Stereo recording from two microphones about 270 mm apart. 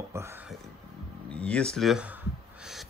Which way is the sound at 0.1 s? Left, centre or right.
Centre.